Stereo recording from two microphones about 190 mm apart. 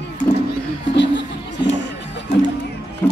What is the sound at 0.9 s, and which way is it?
Music, 70° left (ahead or behind).